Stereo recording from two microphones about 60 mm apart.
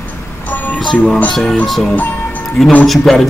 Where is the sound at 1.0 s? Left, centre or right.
Left.